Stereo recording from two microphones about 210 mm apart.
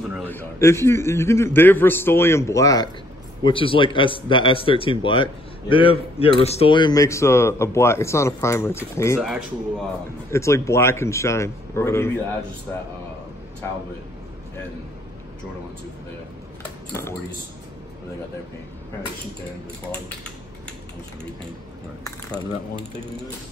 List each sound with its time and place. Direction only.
0.3 s a man's voice: 10° left (ahead or behind)
9.2 s speech: centre (ahead or behind)
10.3 s a man's voice: 15° left (ahead or behind)